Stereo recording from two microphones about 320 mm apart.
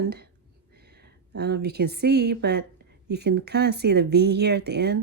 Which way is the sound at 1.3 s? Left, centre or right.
Right.